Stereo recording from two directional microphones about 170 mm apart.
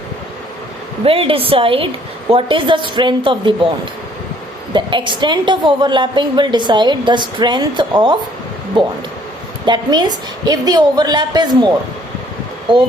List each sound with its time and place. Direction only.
1.0 s a woman's voice: 35° right (ahead or behind)
4.7 s a woman's voice: 30° right (ahead or behind)